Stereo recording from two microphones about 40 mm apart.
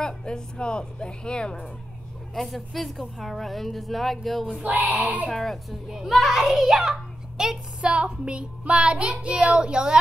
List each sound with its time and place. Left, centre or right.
0.0 s speech: left
2.3 s a woman's voice: centre
4.7 s a child's voice: right
5.3 s speech: centre
5.7 s a woman's voice: centre
6.3 s a child's voice: centre
7.8 s child singing: right